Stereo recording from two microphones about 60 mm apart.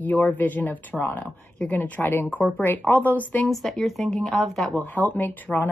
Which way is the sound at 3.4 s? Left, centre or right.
Centre.